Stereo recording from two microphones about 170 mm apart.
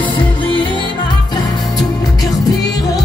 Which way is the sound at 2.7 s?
20° left (ahead or behind).